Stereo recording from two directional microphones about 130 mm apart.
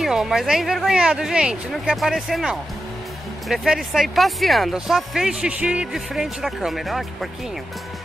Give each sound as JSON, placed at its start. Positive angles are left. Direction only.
{"t": 0.0, "sound": "speech", "side_deg": -5}